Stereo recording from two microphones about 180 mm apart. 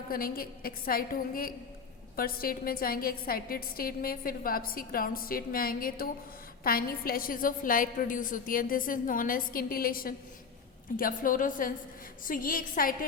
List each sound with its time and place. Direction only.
0.1 s a woman's voice: 55° left (ahead or behind)